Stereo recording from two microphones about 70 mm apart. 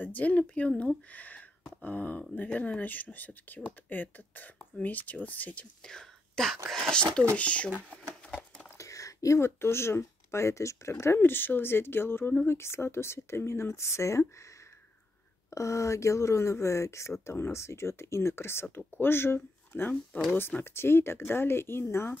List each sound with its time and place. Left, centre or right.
0.0 s speech: left
5.9 s speech: centre
8.7 s speech: left
15.5 s speech: left